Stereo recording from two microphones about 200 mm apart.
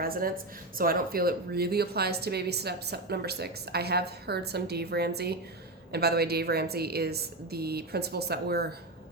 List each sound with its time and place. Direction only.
0.0 s a woman's voice: 45° right (ahead or behind)